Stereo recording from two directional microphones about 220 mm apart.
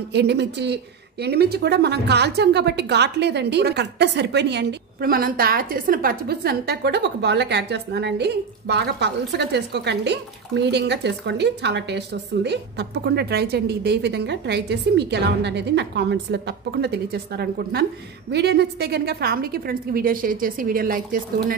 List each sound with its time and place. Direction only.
0.1 s a woman's voice: 50° right (ahead or behind)